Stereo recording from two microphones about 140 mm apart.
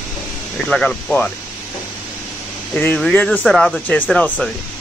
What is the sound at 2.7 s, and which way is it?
Speech, 15° left (ahead or behind).